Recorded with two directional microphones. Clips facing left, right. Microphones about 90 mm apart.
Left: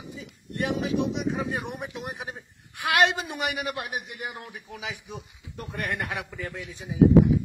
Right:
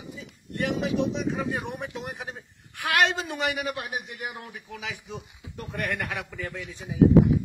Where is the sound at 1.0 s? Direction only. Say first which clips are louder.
Even; 15° left (ahead or behind).